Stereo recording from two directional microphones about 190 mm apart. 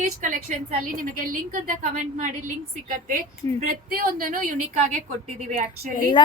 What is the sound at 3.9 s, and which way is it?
Speech, 50° right (ahead or behind).